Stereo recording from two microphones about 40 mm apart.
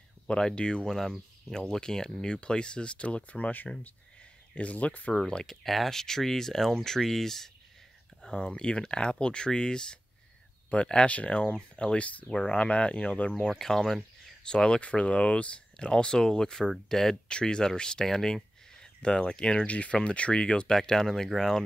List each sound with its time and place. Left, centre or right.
0.3 s speech: left
2.2 s speech: left
5.3 s speech: centre
8.2 s speech: left
10.7 s speech: left
12.3 s speech: centre
12.5 s speech: left
13.3 s speech: centre
14.4 s speech: left
17.3 s speech: left
20.7 s speech: centre